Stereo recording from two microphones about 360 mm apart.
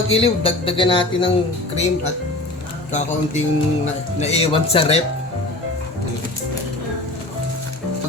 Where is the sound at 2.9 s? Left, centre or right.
Centre.